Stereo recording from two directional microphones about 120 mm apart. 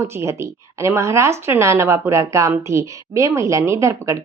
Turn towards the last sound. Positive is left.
turn(degrees=-25)  # may be behind; listen again after turning